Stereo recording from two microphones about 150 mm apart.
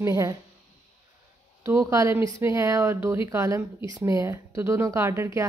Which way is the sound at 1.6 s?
20° right (ahead or behind).